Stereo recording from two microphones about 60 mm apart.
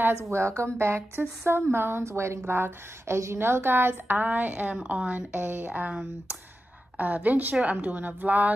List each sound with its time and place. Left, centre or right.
0.3 s a woman's voice: right